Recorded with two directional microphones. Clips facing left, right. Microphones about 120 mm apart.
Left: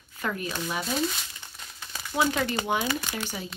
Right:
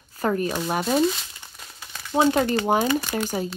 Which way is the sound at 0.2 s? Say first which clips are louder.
Right 8 dB; 40° right (ahead or behind).